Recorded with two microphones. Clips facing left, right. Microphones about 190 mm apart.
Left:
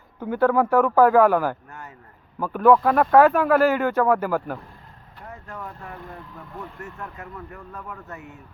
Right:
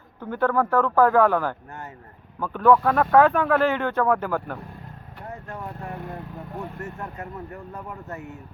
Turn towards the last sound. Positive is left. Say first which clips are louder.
# right 3 dB
turn(degrees=-40)  # may be behind; listen again after turning